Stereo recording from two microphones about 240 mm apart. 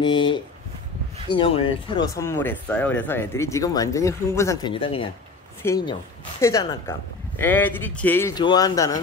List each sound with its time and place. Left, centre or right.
0.0 s speech: centre